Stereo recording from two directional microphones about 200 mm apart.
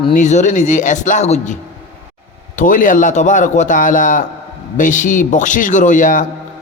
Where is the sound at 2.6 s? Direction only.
40° left (ahead or behind).